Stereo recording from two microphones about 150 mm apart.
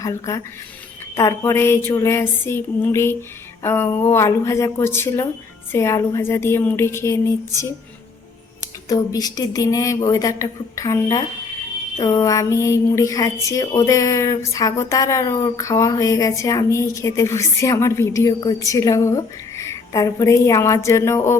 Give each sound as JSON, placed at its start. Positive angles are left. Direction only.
{"t": 0.0, "sound": "a woman's voice", "side_deg": 20}
{"t": 1.1, "sound": "a sound", "side_deg": 20}
{"t": 5.7, "sound": "a woman's voice", "side_deg": 20}
{"t": 8.9, "sound": "a woman's voice", "side_deg": 25}